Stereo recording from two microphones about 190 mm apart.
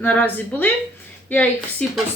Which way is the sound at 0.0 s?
10° left (ahead or behind).